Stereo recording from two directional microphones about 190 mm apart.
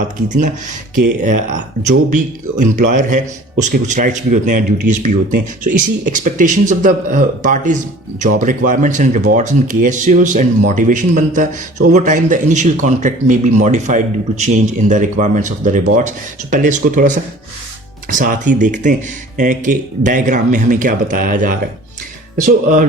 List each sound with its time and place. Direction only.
0.9 s a man's voice: 40° right (ahead or behind)
18.1 s a man's voice: 45° right (ahead or behind)